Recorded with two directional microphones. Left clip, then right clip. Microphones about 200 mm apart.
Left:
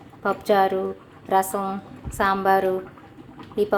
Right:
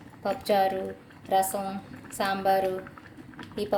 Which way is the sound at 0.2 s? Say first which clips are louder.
Left 5 dB; 15° left (ahead or behind).